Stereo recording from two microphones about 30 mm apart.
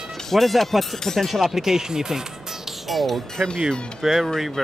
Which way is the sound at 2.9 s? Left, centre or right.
Centre.